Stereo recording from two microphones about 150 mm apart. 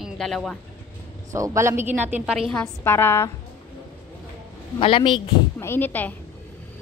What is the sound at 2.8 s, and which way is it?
Speech, 15° left (ahead or behind).